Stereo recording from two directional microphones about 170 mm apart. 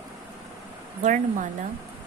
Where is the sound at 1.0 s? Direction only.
45° right (ahead or behind).